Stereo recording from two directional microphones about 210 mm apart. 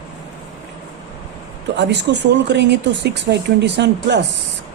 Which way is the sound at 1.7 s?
55° right (ahead or behind).